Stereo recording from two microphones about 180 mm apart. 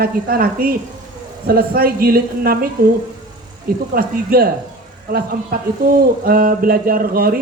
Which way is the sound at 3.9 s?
55° right (ahead or behind).